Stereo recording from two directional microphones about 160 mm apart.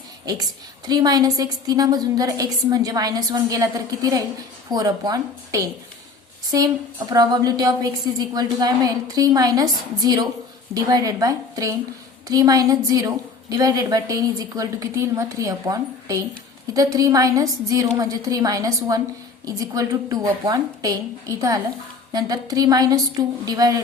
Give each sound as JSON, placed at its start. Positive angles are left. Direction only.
{"t": 0.3, "sound": "a woman's voice", "side_deg": -25}